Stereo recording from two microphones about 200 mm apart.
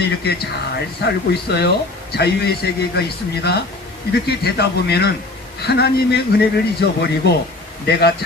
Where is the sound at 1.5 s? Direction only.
55° left (ahead or behind).